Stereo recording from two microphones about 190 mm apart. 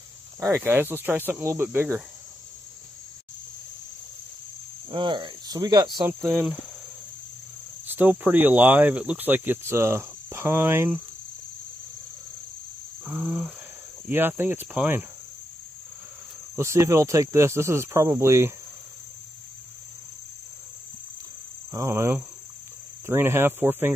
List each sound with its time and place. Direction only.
0.4 s speech: 15° right (ahead or behind)
4.9 s speech: 25° right (ahead or behind)
6.0 s speech: 10° right (ahead or behind)
7.8 s speech: 10° right (ahead or behind)
13.0 s cricket: 5° right (ahead or behind)
14.0 s speech: 10° right (ahead or behind)
16.5 s speech: 15° right (ahead or behind)
21.7 s speech: 15° right (ahead or behind)